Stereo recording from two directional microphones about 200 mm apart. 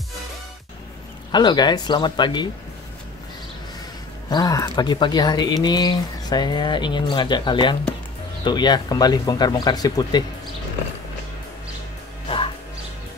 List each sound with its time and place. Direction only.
1.3 s speech: 20° left (ahead or behind)
4.3 s speech: 20° left (ahead or behind)